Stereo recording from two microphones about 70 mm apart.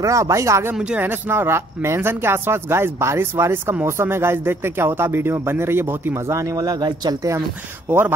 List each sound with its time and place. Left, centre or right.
0.0 s speech: right
0.9 s speech: right